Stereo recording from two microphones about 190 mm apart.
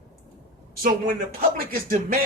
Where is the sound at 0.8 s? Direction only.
50° right (ahead or behind).